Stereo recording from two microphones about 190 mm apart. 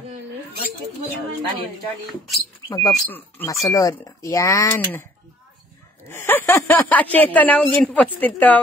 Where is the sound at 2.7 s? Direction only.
20° left (ahead or behind).